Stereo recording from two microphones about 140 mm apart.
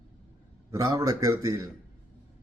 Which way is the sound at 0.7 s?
20° right (ahead or behind).